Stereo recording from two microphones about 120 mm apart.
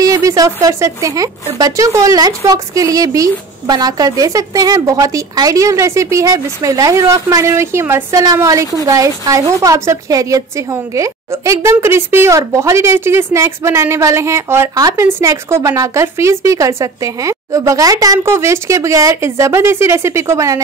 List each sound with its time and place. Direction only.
0.0 s a woman's voice: 25° right (ahead or behind)